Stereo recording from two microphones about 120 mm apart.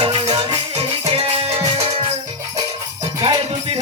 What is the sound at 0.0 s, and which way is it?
Music, 50° right (ahead or behind).